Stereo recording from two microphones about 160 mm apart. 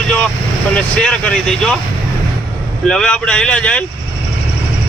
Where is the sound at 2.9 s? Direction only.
5° left (ahead or behind).